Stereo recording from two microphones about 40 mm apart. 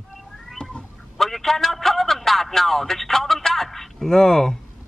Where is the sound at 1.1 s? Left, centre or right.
Centre.